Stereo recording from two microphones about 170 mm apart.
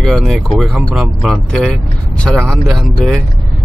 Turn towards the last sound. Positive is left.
turn(degrees=0)  # may be behind; listen again after turning